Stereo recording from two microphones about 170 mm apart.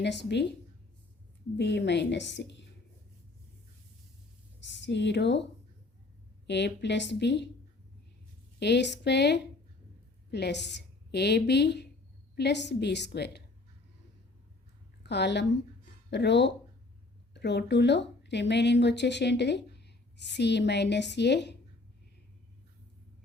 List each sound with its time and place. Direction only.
0.0 s a woman's voice: 90° left
1.5 s a woman's voice: 90° left
4.6 s speech: 90° left
6.5 s a woman's voice: 90° left
8.5 s a woman's voice: 90° left
15.0 s a woman's voice: 90° left